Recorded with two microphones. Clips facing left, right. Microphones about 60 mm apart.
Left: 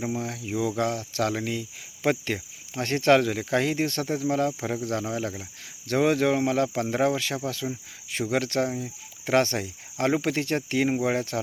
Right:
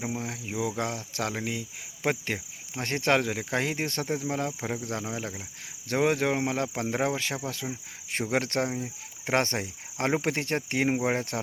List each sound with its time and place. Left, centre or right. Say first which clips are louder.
0.2 s speech: left 3 dB; centre
8.2 s speech: left 2 dB; right